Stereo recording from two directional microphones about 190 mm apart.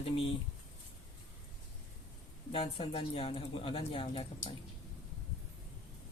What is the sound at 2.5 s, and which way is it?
Speech, 30° left (ahead or behind).